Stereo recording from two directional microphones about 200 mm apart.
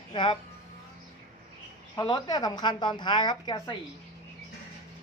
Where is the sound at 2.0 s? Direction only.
20° left (ahead or behind).